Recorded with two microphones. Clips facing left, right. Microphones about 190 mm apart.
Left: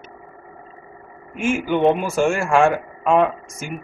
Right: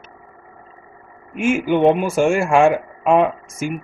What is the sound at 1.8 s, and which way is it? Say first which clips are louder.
Speech: right 2 dB; centre (ahead or behind).